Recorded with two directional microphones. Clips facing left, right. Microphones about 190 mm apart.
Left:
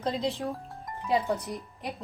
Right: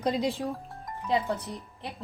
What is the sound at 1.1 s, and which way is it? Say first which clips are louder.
Speech: left 1 dB; 15° left (ahead or behind).